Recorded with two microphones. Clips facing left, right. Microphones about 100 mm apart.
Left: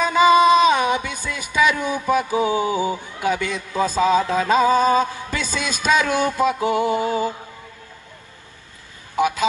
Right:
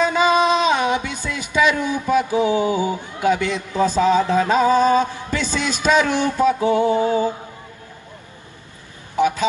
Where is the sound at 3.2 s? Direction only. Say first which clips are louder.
Right 4 dB; 20° right (ahead or behind).